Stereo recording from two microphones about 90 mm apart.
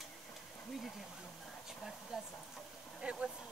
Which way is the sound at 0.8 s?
Centre (ahead or behind).